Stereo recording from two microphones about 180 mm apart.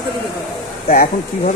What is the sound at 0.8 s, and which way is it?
Speech, 50° left (ahead or behind).